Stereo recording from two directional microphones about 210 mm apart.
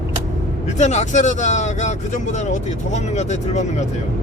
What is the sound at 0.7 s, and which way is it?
Speech, 35° left (ahead or behind).